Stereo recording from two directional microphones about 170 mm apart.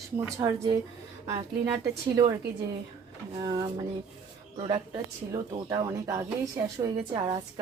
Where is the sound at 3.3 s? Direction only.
25° right (ahead or behind).